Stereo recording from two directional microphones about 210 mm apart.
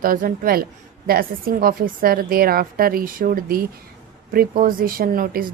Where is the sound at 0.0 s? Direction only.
40° right (ahead or behind).